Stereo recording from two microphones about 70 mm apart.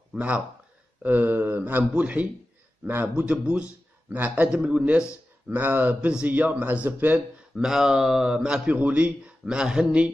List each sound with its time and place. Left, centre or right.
0.1 s a man's voice: centre
2.8 s a man's voice: right
3.2 s a man's voice: centre
7.5 s speech: centre